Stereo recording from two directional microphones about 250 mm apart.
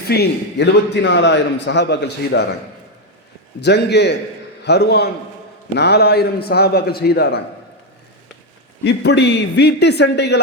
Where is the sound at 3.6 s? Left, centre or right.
Left.